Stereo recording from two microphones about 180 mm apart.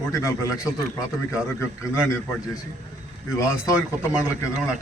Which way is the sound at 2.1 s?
15° left (ahead or behind).